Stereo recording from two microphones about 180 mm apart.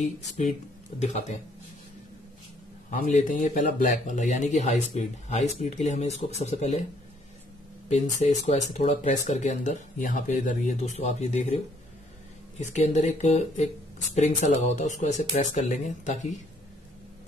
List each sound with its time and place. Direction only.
0.4 s speech: 40° left (ahead or behind)
2.9 s speech: 45° left (ahead or behind)
7.9 s speech: 40° left (ahead or behind)